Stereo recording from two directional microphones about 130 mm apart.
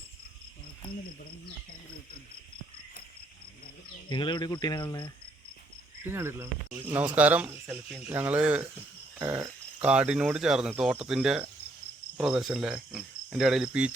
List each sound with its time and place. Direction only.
4.1 s speech: 35° left (ahead or behind)
6.1 s speech: 20° right (ahead or behind)
9.1 s a sound: 15° right (ahead or behind)
9.8 s speech: 10° right (ahead or behind)
12.1 s cricket: 5° right (ahead or behind)